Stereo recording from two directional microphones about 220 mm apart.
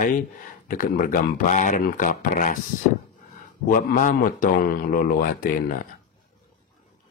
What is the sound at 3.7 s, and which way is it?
Speech, 35° left (ahead or behind).